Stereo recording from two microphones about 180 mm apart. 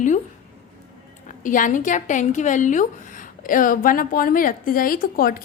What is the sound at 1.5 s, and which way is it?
A woman's voice, 45° left (ahead or behind).